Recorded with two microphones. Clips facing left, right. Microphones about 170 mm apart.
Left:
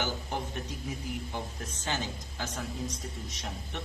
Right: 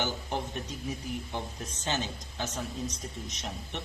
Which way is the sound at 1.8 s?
20° right (ahead or behind).